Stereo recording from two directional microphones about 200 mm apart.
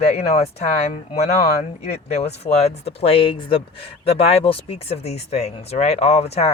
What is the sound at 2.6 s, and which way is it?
A man's voice, 30° left (ahead or behind).